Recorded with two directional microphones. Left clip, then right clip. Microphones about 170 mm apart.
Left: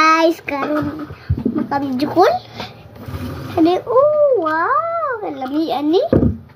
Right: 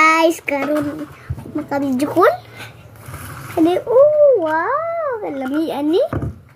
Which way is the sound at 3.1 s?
Centre (ahead or behind).